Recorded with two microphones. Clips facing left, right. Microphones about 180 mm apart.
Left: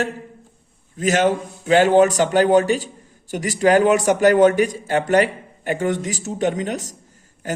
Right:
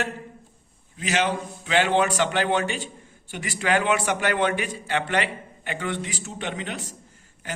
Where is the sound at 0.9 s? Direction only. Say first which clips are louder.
Left 7 dB; 45° left (ahead or behind).